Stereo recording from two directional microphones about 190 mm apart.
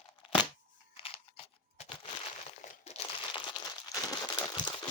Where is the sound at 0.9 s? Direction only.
30° left (ahead or behind).